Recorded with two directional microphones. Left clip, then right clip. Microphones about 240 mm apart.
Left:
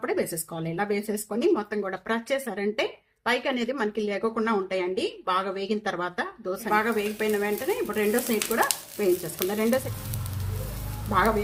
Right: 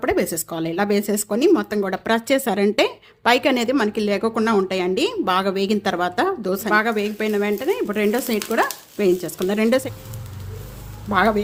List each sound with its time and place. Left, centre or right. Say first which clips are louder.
0.0 s speech: right 7 dB; right